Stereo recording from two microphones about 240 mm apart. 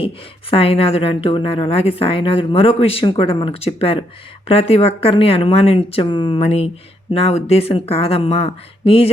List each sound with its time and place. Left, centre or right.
0.5 s a woman's voice: left